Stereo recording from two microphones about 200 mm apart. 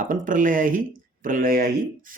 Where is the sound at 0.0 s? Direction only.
40° right (ahead or behind).